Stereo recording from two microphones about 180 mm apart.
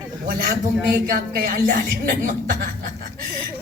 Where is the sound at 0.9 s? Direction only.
55° right (ahead or behind).